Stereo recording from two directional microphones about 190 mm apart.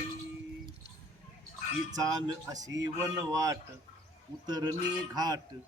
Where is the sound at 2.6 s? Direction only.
15° right (ahead or behind).